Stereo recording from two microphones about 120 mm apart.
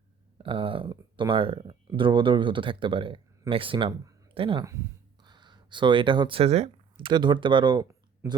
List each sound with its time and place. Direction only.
0.3 s speech: 50° right (ahead or behind)
6.9 s speech: 40° right (ahead or behind)